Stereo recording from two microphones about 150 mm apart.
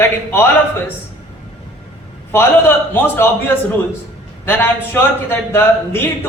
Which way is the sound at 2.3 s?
15° left (ahead or behind).